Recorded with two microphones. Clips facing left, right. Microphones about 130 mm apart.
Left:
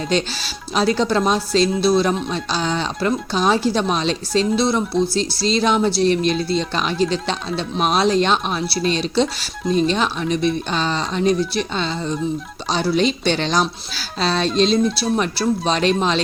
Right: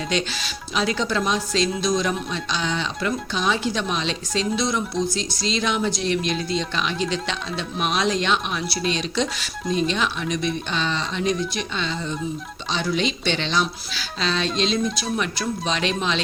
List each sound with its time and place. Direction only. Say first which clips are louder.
0.1 s speech: left 4 dB; 35° left (ahead or behind)